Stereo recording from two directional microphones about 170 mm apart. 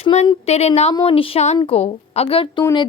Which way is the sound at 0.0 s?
40° left (ahead or behind).